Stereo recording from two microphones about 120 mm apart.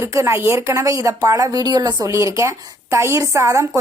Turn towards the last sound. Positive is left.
turn(degrees=-25)  # may be behind; listen again after turning